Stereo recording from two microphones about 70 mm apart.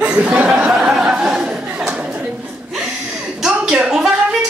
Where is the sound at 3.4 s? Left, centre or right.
Centre.